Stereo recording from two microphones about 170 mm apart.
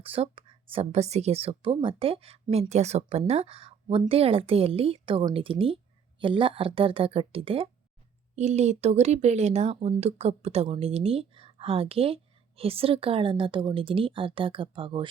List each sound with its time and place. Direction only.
0.0 s speech: 35° right (ahead or behind)